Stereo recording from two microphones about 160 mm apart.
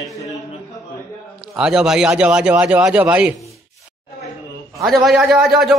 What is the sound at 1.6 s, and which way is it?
A man's voice, 5° right (ahead or behind).